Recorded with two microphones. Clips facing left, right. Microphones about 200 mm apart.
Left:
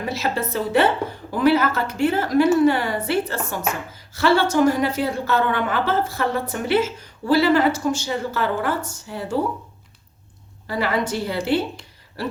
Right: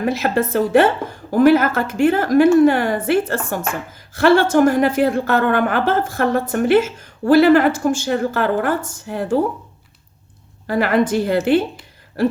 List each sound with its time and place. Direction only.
0.0 s a woman's voice: 50° right (ahead or behind)
10.7 s a woman's voice: 50° right (ahead or behind)